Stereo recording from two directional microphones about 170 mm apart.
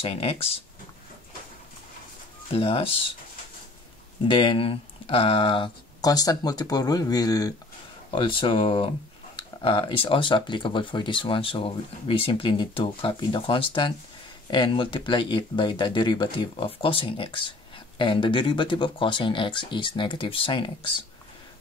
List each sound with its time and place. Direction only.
0.0 s speech: 35° left (ahead or behind)
2.5 s speech: 35° left (ahead or behind)
4.3 s speech: 30° left (ahead or behind)